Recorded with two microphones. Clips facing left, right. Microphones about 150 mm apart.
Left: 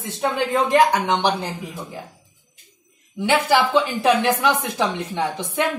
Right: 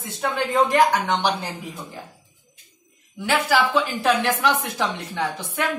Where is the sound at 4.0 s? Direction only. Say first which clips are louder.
Left 2 dB; 20° left (ahead or behind).